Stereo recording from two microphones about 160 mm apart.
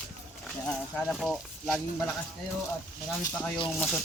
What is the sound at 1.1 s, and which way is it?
Speech, centre (ahead or behind).